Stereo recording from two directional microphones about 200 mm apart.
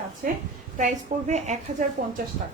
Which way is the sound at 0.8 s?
35° right (ahead or behind).